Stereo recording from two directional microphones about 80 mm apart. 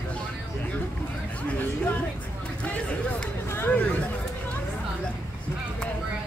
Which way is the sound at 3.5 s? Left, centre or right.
Left.